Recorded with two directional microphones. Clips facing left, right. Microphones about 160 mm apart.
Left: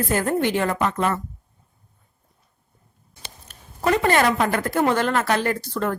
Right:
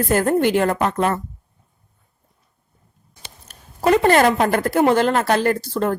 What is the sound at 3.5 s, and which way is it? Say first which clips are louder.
A woman's voice: right 5 dB; 35° right (ahead or behind).